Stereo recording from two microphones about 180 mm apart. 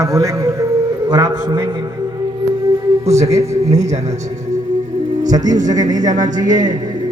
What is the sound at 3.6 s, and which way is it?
Speech, 40° right (ahead or behind).